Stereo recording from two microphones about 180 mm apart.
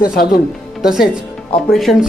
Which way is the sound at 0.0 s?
55° left (ahead or behind).